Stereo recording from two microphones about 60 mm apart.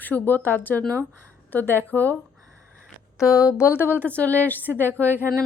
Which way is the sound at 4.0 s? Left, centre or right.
Left.